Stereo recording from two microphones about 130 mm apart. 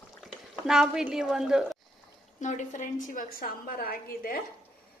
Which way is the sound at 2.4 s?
70° left (ahead or behind).